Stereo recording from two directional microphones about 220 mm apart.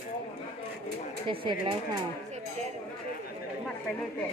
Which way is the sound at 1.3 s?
25° right (ahead or behind).